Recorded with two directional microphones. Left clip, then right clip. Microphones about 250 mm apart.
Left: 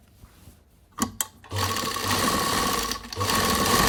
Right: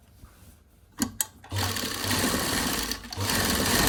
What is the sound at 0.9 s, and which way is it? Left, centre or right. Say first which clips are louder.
Sewing machine: left 2 dB; centre.